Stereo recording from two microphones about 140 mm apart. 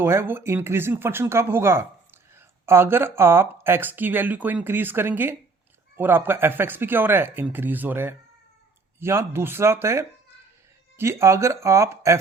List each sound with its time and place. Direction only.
0.0 s speech: 15° right (ahead or behind)